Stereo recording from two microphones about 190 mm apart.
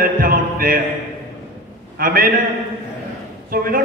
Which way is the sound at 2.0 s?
50° right (ahead or behind).